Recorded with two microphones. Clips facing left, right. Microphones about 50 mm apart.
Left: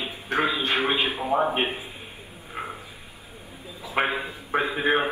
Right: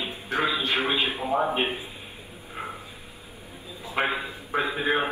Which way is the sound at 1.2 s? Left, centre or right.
Centre.